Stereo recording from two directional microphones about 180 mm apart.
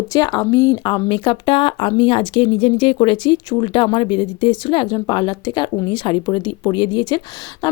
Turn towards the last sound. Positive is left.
turn(degrees=25)  # may be behind; listen again after turning